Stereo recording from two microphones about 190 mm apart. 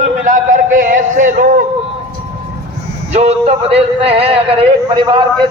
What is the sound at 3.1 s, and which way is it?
Speech, 35° right (ahead or behind).